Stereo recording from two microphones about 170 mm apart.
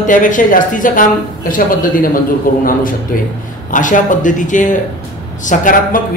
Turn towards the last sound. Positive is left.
turn(degrees=50)  # may be behind; listen again after turning